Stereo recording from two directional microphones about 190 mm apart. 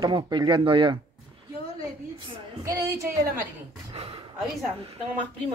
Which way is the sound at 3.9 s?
30° right (ahead or behind).